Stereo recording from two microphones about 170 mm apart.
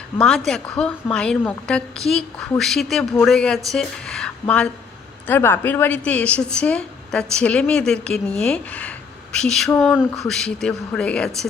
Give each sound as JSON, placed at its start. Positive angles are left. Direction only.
{"t": 0.2, "sound": "a woman's voice", "side_deg": 5}